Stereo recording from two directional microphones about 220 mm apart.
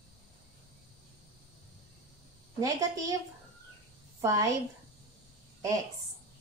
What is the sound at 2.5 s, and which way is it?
Speech, 15° right (ahead or behind).